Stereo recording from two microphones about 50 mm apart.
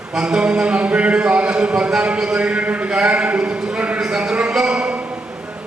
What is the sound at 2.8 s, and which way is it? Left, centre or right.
A man's voice, centre.